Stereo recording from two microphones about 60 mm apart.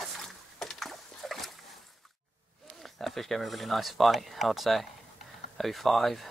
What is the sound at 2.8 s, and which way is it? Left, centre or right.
Speech, centre.